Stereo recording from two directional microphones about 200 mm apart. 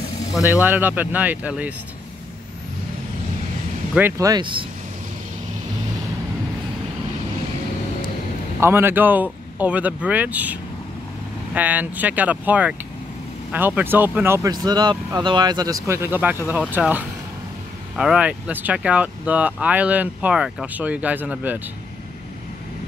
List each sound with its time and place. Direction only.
0.5 s speech: 10° right (ahead or behind)
3.9 s speech: 15° right (ahead or behind)
8.5 s speech: 10° right (ahead or behind)